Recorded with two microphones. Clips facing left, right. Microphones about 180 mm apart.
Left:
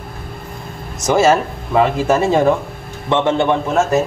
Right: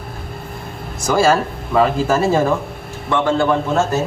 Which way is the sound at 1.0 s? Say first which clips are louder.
Left 2 dB; 20° left (ahead or behind).